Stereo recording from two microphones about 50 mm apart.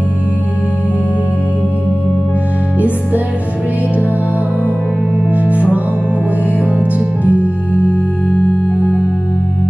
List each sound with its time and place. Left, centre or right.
5.3 s music: right
7.3 s music: left